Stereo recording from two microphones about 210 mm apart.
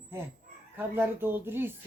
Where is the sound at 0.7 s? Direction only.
10° right (ahead or behind).